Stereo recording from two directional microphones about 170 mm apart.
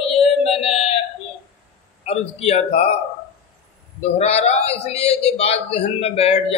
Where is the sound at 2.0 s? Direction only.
40° left (ahead or behind).